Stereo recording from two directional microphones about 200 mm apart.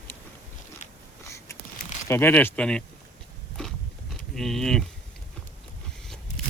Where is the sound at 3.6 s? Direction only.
Centre (ahead or behind).